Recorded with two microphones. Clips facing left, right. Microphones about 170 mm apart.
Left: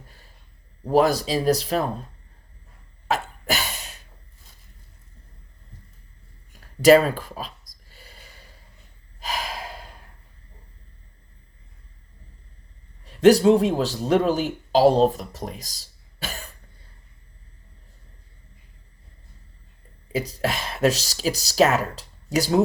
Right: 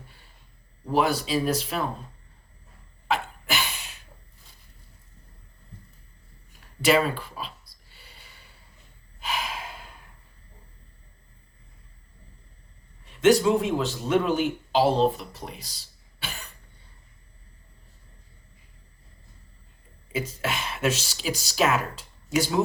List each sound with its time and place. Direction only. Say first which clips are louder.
0.9 s speech: left 5 dB; 40° left (ahead or behind)
3.1 s sneeze: left 2 dB; 40° left (ahead or behind)
6.8 s a sound: left 7 dB; 40° left (ahead or behind)
9.2 s snort: left 1 dB; 40° left (ahead or behind)
13.1 s speech: left 5 dB; 35° left (ahead or behind)
20.1 s speech: left 4 dB; 35° left (ahead or behind)